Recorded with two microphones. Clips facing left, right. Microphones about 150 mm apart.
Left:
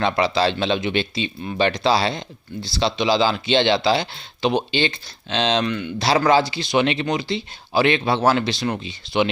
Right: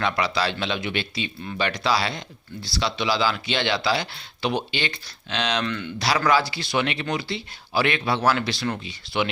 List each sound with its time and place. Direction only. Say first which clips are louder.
0.0 s speech: left 5 dB; 25° left (ahead or behind)